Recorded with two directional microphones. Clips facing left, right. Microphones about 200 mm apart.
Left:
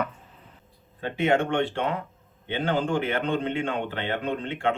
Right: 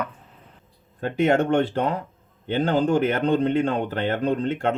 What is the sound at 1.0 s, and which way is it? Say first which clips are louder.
Speech: right 4 dB; 45° right (ahead or behind).